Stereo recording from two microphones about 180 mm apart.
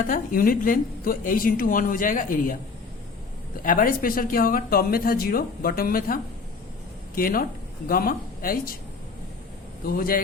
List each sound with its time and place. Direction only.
0.0 s a woman's voice: 50° left (ahead or behind)
3.6 s a woman's voice: 50° left (ahead or behind)
7.2 s a woman's voice: 55° left (ahead or behind)
9.8 s a woman's voice: 55° left (ahead or behind)